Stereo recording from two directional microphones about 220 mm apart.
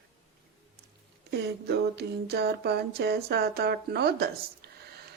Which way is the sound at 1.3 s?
50° right (ahead or behind).